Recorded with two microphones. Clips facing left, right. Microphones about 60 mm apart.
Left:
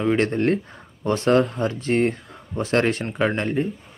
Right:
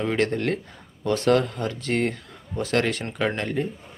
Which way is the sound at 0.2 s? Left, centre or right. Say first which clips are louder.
Left 3 dB; left.